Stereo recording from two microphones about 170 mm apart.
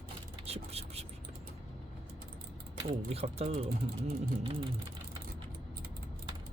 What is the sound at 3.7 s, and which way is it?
Speech, 60° right (ahead or behind).